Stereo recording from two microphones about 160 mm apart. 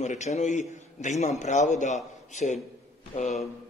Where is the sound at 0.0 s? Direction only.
45° left (ahead or behind).